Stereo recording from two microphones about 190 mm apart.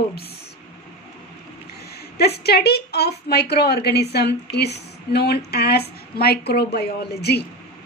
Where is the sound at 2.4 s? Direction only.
55° left (ahead or behind).